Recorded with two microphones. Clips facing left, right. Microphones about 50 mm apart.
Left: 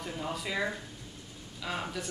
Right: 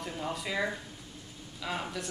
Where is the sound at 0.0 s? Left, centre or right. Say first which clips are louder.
Even; centre.